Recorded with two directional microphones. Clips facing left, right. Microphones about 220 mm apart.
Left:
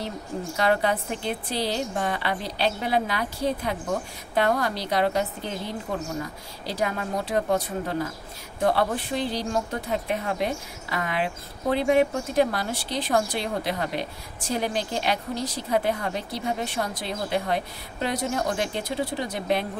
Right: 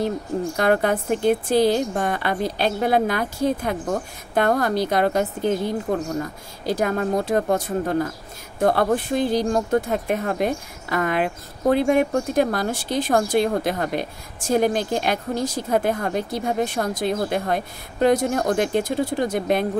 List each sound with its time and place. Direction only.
0.6 s speech: 50° right (ahead or behind)